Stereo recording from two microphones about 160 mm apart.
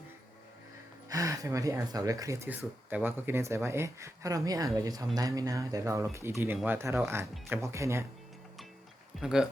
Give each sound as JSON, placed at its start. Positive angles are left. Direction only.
{"t": 1.1, "sound": "speech", "side_deg": -20}
{"t": 9.2, "sound": "speech", "side_deg": -5}